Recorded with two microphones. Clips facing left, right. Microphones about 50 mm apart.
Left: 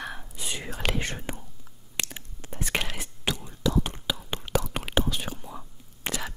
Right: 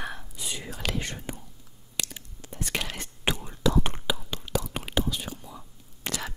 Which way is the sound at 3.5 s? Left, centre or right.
Right.